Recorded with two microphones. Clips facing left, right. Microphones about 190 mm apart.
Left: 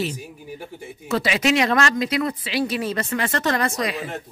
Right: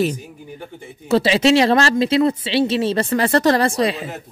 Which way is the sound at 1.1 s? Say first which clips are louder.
Right 6 dB; 30° right (ahead or behind).